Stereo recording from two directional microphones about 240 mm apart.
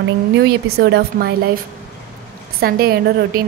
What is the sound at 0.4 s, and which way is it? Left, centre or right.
Speech, right.